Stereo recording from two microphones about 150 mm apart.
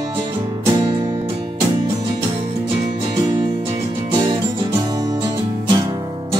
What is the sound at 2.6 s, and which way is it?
Music, 30° right (ahead or behind).